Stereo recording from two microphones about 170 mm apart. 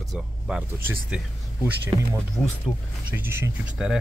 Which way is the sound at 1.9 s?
25° right (ahead or behind).